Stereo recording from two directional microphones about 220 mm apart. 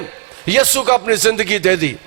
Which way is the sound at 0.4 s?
10° right (ahead or behind).